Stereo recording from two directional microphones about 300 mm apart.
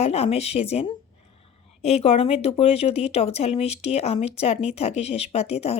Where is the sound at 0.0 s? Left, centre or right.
Centre.